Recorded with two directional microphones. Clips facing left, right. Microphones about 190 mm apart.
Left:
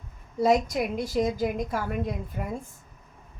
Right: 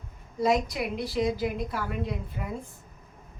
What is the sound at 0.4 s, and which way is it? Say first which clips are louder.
A woman's voice: left 3 dB; 45° left (ahead or behind).